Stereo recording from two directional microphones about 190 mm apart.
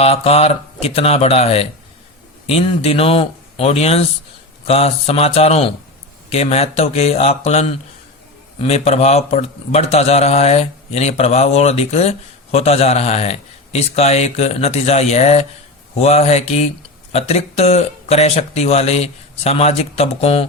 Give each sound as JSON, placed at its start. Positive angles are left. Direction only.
{"t": 0.0, "sound": "a man's voice", "side_deg": 30}